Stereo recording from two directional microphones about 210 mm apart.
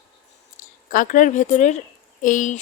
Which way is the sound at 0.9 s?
40° left (ahead or behind).